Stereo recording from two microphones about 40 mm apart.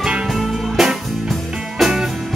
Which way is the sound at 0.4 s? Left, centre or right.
Centre.